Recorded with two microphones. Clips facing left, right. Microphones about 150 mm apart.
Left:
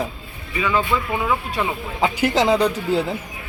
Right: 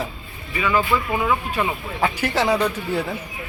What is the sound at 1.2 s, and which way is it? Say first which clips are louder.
Speech: even; 5° left (ahead or behind).